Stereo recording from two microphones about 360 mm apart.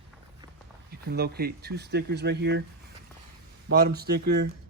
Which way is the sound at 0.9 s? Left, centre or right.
Right.